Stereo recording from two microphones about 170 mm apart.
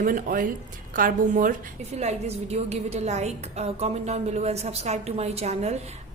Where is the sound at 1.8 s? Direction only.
40° right (ahead or behind).